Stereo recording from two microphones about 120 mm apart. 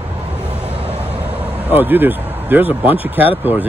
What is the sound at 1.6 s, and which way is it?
Speech, 15° right (ahead or behind).